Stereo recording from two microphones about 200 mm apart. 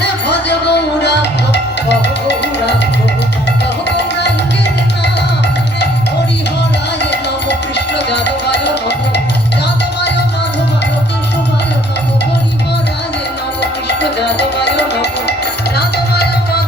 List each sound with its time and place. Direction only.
0.0 s music: 60° left (ahead or behind)
3.8 s music: 60° left (ahead or behind)
7.0 s music: 60° left (ahead or behind)
13.6 s music: 60° left (ahead or behind)